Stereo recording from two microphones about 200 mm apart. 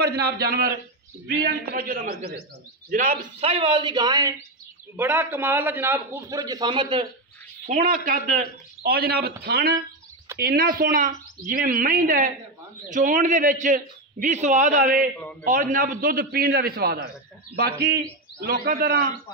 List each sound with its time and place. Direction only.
0.0 s a woman's voice: 55° right (ahead or behind); by 7.1 s 25° right (ahead or behind)
7.6 s a woman's voice: 45° right (ahead or behind)
9.8 s a sound: 15° right (ahead or behind)
10.4 s a woman's voice: 50° right (ahead or behind)
18.4 s a woman's voice: 45° right (ahead or behind)